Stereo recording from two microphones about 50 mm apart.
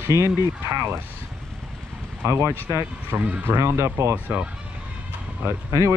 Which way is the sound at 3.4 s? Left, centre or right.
Right.